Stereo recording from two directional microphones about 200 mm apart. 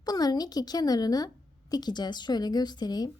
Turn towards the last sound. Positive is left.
turn(degrees=20)  # may be behind; listen again after turning